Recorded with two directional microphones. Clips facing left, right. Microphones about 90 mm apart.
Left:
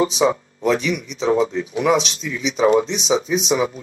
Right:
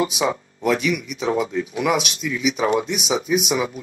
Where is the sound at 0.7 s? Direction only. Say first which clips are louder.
Left 1 dB; 30° left (ahead or behind).